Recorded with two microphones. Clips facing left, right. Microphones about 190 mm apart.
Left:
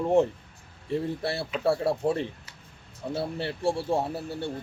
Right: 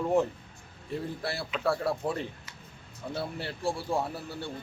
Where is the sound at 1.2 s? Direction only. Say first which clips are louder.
Left 4 dB; 25° left (ahead or behind).